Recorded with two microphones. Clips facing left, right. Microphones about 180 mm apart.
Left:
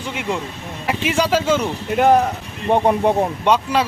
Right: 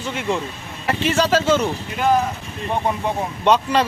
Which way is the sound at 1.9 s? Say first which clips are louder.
Left 6 dB; 65° left (ahead or behind).